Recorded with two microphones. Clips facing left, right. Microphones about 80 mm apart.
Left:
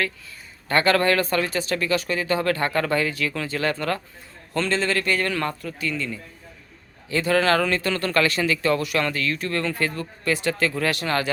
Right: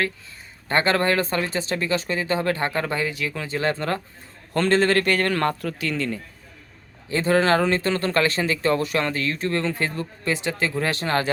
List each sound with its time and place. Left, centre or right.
0.7 s speech: right
4.5 s a man's voice: right
7.1 s speech: right